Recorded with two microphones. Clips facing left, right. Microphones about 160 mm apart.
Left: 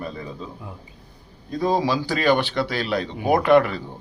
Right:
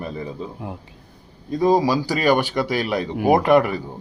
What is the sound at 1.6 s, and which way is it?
A man's voice, 15° right (ahead or behind).